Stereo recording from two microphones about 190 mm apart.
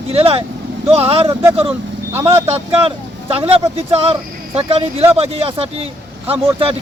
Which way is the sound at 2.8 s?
30° right (ahead or behind).